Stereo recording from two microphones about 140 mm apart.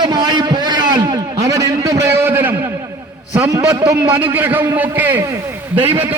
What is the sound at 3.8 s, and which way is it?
Speech, 25° right (ahead or behind).